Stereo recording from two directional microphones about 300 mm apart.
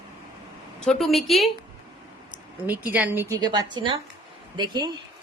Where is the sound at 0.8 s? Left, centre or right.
Centre.